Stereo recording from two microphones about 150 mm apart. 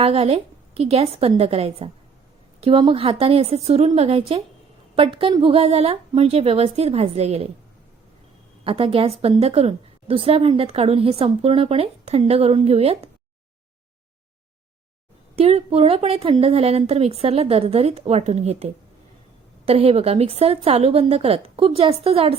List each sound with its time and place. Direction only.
0.0 s a woman's voice: 40° right (ahead or behind)
8.6 s a woman's voice: 40° right (ahead or behind)
15.4 s a woman's voice: 45° right (ahead or behind)